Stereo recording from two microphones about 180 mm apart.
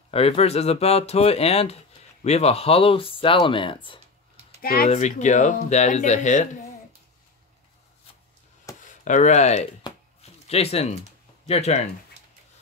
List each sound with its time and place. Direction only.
0.1 s speech: 35° left (ahead or behind)
4.6 s speech: 55° left (ahead or behind)
4.9 s speech: 40° left (ahead or behind)
8.7 s a sound: 20° left (ahead or behind)
9.0 s speech: 40° left (ahead or behind)